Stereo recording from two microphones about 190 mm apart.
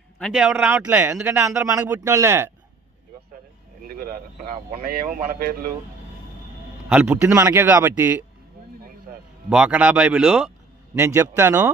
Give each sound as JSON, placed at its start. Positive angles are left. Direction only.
{"t": 0.3, "sound": "speech", "side_deg": -5}
{"t": 3.8, "sound": "speech", "side_deg": -50}
{"t": 6.9, "sound": "speech", "side_deg": -10}
{"t": 9.5, "sound": "speech", "side_deg": -5}
{"t": 11.0, "sound": "speech", "side_deg": -15}